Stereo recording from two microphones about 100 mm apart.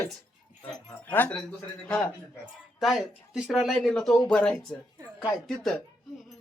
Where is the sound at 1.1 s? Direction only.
15° left (ahead or behind).